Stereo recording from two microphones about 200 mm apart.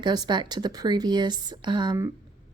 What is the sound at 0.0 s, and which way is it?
A woman's voice, 20° right (ahead or behind).